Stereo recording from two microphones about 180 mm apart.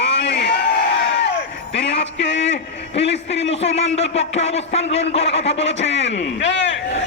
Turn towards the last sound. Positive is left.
turn(degrees=90)